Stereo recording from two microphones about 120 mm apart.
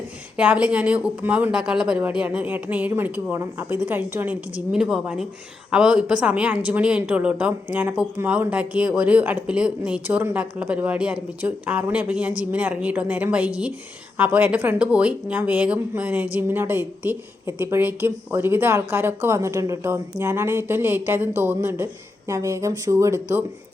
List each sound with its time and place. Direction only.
0.3 s a woman's voice: 10° right (ahead or behind)